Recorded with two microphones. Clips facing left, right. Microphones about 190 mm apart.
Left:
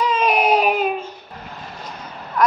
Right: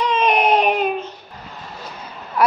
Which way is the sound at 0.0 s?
5° left (ahead or behind).